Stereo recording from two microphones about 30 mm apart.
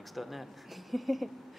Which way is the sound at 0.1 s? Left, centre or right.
Centre.